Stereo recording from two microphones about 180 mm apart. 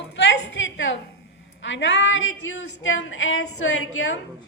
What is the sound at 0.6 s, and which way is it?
A woman's voice, 90° left.